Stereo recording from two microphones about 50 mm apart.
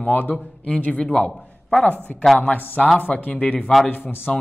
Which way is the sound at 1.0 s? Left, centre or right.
Centre.